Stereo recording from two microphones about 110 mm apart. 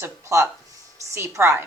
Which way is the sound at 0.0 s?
25° right (ahead or behind).